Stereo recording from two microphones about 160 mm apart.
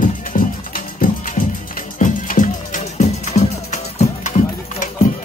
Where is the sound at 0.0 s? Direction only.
60° left (ahead or behind).